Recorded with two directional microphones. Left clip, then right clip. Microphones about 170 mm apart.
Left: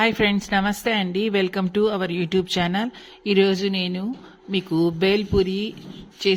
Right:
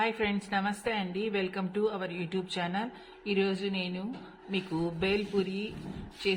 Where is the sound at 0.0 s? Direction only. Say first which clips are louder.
Left 10 dB; 55° left (ahead or behind).